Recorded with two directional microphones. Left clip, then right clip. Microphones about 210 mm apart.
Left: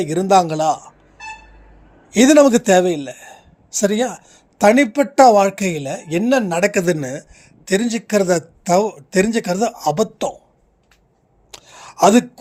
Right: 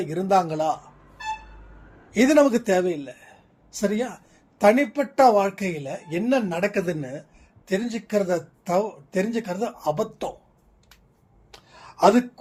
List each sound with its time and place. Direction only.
0.0 s a man's voice: 50° left (ahead or behind)
2.0 s a man's voice: 45° left (ahead or behind)
11.5 s a sound: 50° left (ahead or behind)